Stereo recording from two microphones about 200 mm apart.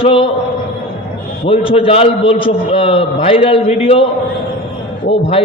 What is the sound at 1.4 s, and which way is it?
A man's voice, 25° left (ahead or behind).